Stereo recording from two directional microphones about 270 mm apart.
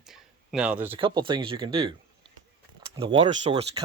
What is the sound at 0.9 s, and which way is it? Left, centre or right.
Speech, centre.